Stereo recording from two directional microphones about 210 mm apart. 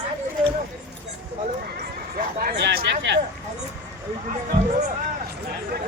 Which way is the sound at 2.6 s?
55° right (ahead or behind).